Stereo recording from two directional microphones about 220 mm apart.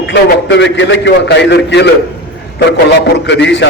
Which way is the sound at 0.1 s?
55° left (ahead or behind).